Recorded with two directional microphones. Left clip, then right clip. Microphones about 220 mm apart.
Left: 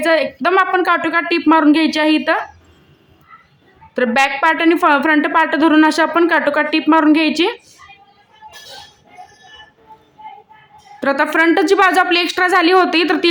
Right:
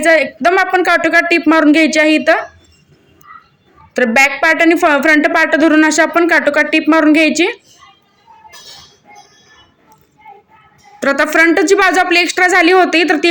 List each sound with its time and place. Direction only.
0.0 s a woman's voice: centre (ahead or behind)
3.9 s a woman's voice: 5° right (ahead or behind)
11.0 s a woman's voice: centre (ahead or behind)